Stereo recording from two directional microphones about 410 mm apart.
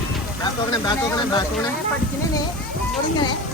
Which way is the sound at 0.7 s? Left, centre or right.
Centre.